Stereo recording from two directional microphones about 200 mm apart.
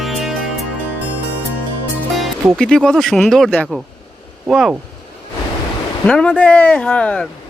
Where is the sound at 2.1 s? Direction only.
5° left (ahead or behind).